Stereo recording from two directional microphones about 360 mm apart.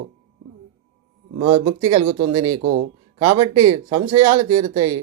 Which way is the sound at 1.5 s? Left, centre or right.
Right.